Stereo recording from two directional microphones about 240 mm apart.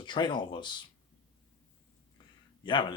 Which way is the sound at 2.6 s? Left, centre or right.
Centre.